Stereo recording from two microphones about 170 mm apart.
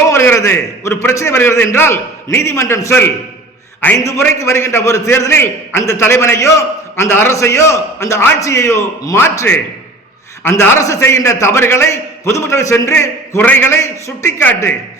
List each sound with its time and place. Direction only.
0.1 s a man's voice: 15° left (ahead or behind)